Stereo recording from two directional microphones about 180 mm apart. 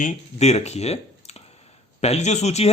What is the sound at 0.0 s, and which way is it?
Speech, 40° left (ahead or behind).